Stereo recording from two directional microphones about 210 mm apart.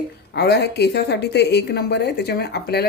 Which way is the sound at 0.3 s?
50° left (ahead or behind).